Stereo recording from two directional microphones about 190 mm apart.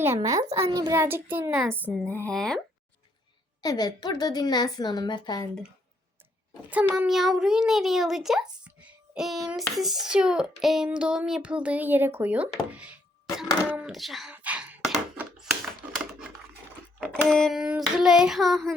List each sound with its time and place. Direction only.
0.0 s a child's voice: 15° right (ahead or behind)
1.9 s a child's voice: 5° left (ahead or behind)
3.6 s a woman's voice: 20° left (ahead or behind)
6.7 s a child's voice: 10° right (ahead or behind)
14.3 s a sound: 5° right (ahead or behind)
17.0 s a child's voice: 5° left (ahead or behind)